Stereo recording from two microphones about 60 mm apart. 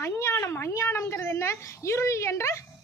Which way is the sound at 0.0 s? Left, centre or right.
Left.